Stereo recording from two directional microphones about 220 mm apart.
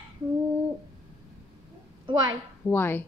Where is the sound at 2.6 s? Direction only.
10° left (ahead or behind).